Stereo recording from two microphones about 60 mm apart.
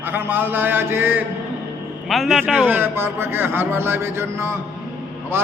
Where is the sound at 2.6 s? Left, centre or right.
Right.